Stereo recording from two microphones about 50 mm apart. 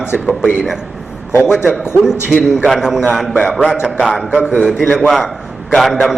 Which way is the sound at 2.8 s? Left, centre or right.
Centre.